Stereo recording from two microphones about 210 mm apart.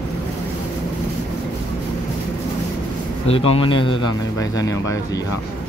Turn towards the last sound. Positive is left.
turn(degrees=15)  # may be behind; listen again after turning